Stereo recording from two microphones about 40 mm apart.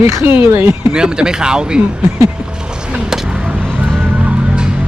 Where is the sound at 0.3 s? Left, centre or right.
Right.